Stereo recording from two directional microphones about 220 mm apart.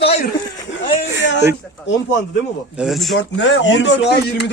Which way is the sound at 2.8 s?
Centre (ahead or behind).